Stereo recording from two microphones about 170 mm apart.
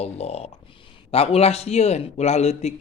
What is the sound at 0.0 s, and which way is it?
A man's voice, 40° left (ahead or behind).